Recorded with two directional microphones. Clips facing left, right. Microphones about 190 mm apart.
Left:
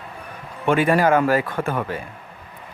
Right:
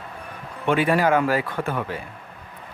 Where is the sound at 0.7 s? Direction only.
45° left (ahead or behind).